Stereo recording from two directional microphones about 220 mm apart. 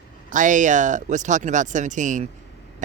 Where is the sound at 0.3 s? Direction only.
35° right (ahead or behind).